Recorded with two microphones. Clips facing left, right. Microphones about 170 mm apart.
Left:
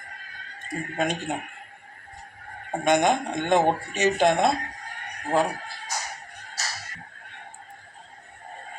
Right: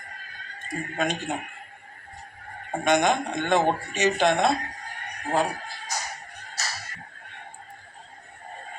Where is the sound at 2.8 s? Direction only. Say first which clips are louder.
Left 1 dB; 50° left (ahead or behind).